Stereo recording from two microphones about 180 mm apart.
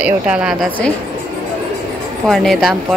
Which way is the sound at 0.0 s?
5° right (ahead or behind).